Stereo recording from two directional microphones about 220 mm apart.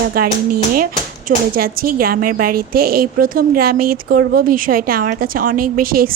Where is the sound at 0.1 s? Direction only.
40° right (ahead or behind).